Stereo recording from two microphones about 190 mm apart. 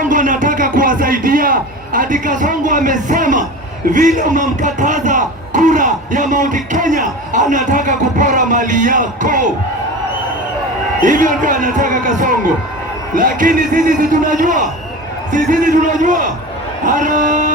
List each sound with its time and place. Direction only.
0.0 s a man's voice: 45° right (ahead or behind)
11.0 s speech: 45° right (ahead or behind)
16.8 s a sound: 40° right (ahead or behind)